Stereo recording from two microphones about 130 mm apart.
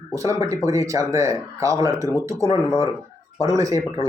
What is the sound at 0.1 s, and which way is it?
Speech, 25° right (ahead or behind).